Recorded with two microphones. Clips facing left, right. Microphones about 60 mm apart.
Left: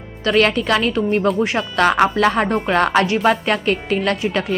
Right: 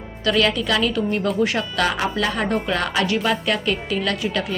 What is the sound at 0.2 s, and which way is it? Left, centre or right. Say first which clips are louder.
Speech: left 3 dB; left.